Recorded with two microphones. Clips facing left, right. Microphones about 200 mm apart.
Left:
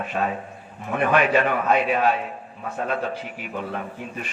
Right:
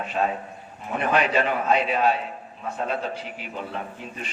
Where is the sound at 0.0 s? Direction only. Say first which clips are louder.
Even; 55° left (ahead or behind).